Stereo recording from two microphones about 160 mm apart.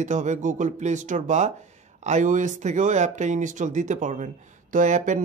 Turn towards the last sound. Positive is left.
turn(degrees=-50)  # may be behind; listen again after turning